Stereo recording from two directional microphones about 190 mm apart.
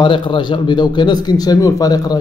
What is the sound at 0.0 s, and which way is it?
A man's voice, 25° left (ahead or behind).